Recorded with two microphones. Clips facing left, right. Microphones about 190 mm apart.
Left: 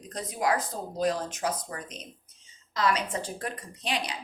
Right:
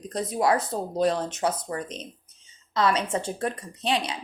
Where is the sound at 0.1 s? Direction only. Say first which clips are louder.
Right 5 dB; 30° right (ahead or behind).